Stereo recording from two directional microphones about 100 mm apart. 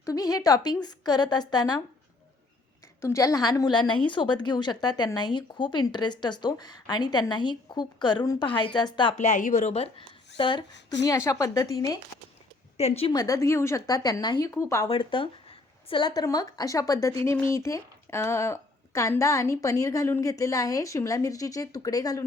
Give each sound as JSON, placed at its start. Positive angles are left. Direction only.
{"t": 0.0, "sound": "a woman's voice", "side_deg": 35}
{"t": 3.0, "sound": "a woman's voice", "side_deg": 30}
{"t": 10.3, "sound": "speech", "side_deg": 55}
{"t": 10.8, "sound": "speech", "side_deg": 35}
{"t": 12.7, "sound": "a woman's voice", "side_deg": 90}
{"t": 13.1, "sound": "speech", "side_deg": 40}
{"t": 14.5, "sound": "speech", "side_deg": 30}
{"t": 14.8, "sound": "speech", "side_deg": 60}
{"t": 16.0, "sound": "speech", "side_deg": 40}